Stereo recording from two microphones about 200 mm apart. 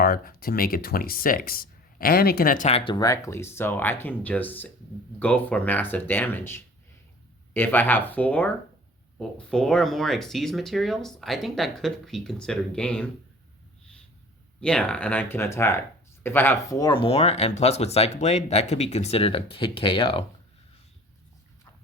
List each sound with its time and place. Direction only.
0.0 s speech: 45° left (ahead or behind); by 13.1 s 5° left (ahead or behind)
14.6 s speech: 5° left (ahead or behind); by 20.2 s 25° left (ahead or behind)